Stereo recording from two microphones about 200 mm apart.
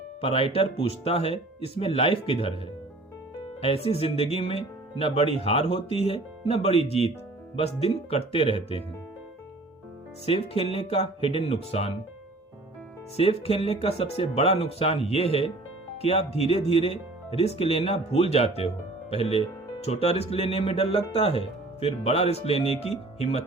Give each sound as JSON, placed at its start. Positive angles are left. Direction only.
{"t": 0.2, "sound": "speech", "side_deg": 30}
{"t": 3.6, "sound": "speech", "side_deg": 30}
{"t": 10.5, "sound": "speech", "side_deg": 30}
{"t": 13.1, "sound": "speech", "side_deg": 30}